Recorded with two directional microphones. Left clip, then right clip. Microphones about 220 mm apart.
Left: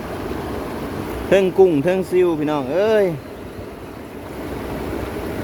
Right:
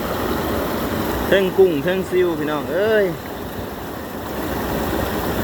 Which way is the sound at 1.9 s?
25° left (ahead or behind).